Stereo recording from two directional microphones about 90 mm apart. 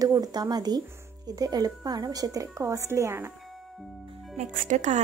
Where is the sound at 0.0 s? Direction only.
45° right (ahead or behind).